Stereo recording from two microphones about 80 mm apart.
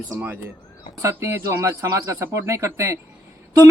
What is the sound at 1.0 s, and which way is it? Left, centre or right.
Speech, right.